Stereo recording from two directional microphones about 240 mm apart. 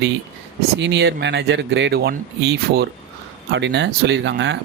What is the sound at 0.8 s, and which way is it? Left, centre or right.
Speech, right.